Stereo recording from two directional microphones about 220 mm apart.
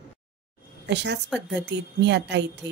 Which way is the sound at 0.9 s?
50° right (ahead or behind).